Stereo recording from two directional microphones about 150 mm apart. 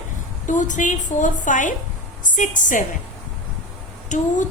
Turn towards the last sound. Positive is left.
turn(degrees=55)  # may be behind; listen again after turning